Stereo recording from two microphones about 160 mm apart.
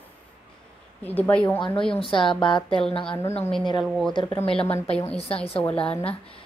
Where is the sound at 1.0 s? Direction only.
10° left (ahead or behind).